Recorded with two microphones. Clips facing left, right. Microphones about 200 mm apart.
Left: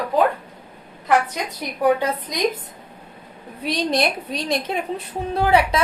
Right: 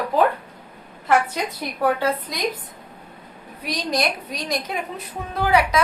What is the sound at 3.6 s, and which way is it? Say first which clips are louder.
A woman's voice: left 3 dB; 30° left (ahead or behind).